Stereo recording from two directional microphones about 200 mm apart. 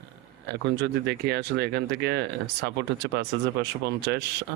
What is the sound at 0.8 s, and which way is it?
Speech, 55° right (ahead or behind).